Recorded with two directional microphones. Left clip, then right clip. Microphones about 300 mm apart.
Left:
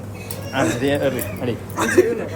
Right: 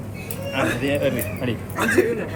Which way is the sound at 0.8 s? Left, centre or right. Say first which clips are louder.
Left 2 dB; left.